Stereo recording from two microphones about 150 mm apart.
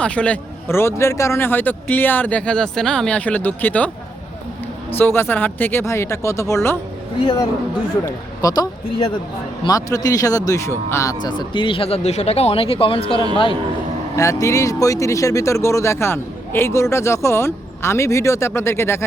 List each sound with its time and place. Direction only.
0.0 s a man's voice: 10° left (ahead or behind)
8.4 s a man's voice: 25° left (ahead or behind)
9.6 s speech: 25° left (ahead or behind)
14.2 s speech: 20° left (ahead or behind)